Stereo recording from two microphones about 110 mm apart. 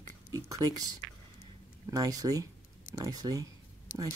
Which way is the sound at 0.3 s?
35° right (ahead or behind).